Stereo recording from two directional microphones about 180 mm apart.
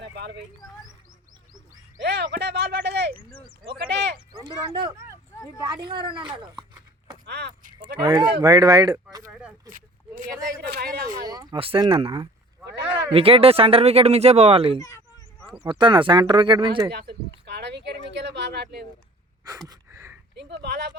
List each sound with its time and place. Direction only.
2.0 s speech: 70° right (ahead or behind)
4.7 s speech: 30° right (ahead or behind)
7.3 s speech: 70° right (ahead or behind)
8.0 s speech: 25° right (ahead or behind)
9.6 s a sound: 50° right (ahead or behind)
10.7 s a man's voice: 60° right (ahead or behind)
11.3 s speech: 25° right (ahead or behind)
14.8 s speech: 15° left (ahead or behind)
15.5 s speech: 25° right (ahead or behind)
16.9 s speech: 65° right (ahead or behind)
19.5 s gasp: 20° right (ahead or behind)
20.3 s speech: 70° right (ahead or behind)